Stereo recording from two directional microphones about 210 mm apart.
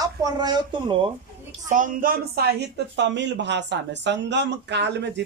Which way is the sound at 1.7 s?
40° right (ahead or behind).